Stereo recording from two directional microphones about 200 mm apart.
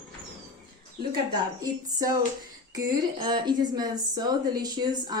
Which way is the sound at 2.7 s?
20° right (ahead or behind).